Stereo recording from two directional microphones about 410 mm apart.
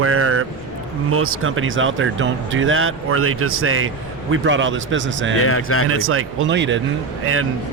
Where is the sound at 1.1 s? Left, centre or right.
Right.